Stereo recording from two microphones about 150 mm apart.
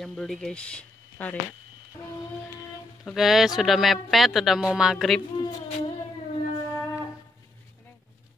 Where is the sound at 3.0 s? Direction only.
Centre (ahead or behind).